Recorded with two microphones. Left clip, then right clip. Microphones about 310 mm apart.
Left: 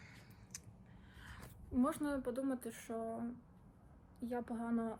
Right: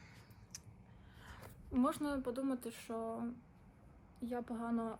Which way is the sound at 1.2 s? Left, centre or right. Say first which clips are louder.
Right 1 dB; right.